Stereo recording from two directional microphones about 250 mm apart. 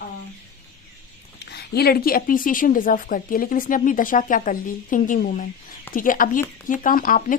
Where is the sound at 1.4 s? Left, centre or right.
Left.